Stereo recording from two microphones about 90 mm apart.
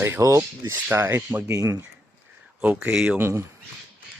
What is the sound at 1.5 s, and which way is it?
Speech, 35° right (ahead or behind).